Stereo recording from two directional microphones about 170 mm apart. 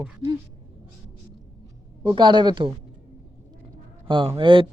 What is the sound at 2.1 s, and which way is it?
Speech, 25° right (ahead or behind).